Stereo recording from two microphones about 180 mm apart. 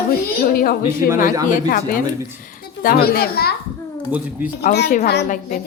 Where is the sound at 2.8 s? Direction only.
55° left (ahead or behind).